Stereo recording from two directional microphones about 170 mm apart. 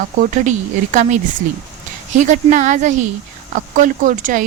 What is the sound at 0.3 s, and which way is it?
A woman's voice, 50° right (ahead or behind).